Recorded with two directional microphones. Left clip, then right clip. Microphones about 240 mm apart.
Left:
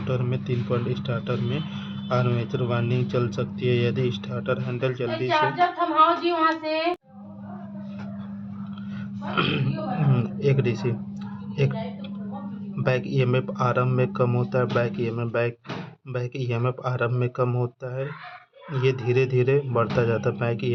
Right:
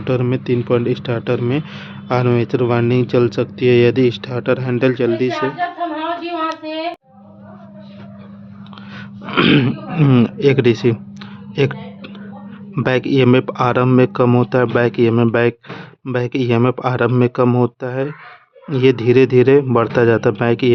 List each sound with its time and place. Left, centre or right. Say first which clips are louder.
0.0 s speech: right 10 dB; right
9.3 s speech: right 11 dB; right